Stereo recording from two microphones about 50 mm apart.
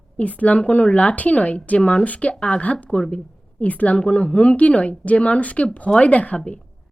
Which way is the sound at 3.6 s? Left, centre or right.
Left.